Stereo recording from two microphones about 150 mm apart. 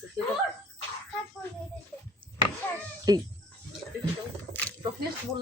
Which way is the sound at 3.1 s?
25° right (ahead or behind).